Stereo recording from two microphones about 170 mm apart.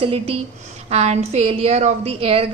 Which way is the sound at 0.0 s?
35° right (ahead or behind).